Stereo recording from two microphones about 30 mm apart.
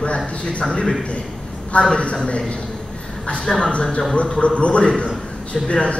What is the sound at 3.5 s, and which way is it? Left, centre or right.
Speech, left.